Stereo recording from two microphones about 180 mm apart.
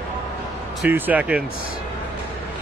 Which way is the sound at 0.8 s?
10° right (ahead or behind).